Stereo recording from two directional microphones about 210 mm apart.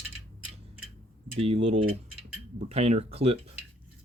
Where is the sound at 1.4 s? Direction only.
30° right (ahead or behind).